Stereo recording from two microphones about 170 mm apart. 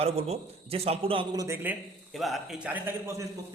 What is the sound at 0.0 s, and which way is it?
A man's voice, 35° right (ahead or behind).